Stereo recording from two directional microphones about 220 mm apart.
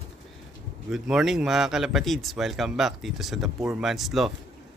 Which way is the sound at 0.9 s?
Centre (ahead or behind).